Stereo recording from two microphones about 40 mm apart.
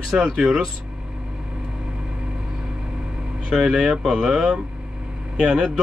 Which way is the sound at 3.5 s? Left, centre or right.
Centre.